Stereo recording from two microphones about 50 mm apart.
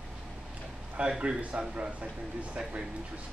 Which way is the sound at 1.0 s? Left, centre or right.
Right.